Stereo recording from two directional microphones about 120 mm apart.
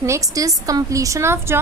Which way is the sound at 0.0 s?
25° right (ahead or behind).